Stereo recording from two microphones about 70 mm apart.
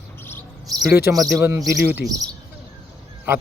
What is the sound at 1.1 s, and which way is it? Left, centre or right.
Speech, right.